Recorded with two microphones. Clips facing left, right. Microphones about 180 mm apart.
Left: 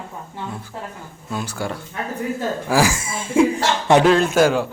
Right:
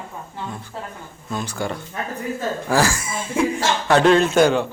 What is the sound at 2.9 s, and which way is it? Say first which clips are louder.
Speech: left 4 dB; 25° left (ahead or behind).